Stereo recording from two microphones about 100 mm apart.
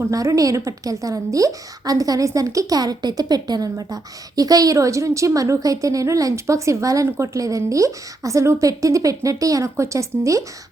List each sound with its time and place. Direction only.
0.1 s a woman's voice: 35° right (ahead or behind)